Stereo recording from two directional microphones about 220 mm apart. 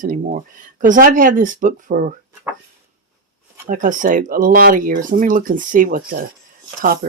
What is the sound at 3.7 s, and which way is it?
Speech, 35° right (ahead or behind).